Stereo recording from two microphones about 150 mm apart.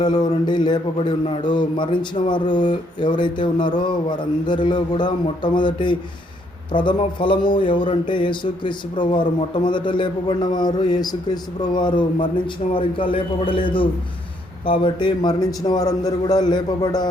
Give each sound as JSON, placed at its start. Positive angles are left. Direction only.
{"t": 0.0, "sound": "a man's voice", "side_deg": 30}